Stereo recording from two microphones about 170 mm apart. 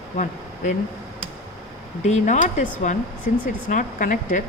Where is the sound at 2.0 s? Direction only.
45° left (ahead or behind).